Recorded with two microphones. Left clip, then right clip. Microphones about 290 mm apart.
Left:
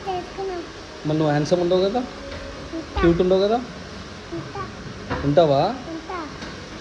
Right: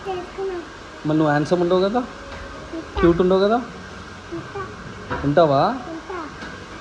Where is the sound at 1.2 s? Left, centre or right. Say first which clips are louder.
Right 1 dB; right.